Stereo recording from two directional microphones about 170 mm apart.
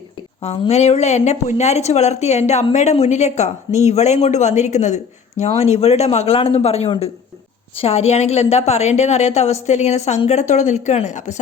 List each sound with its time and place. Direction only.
0.4 s speech: 35° left (ahead or behind)